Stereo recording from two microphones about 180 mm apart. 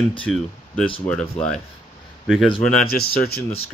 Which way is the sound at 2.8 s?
60° left (ahead or behind).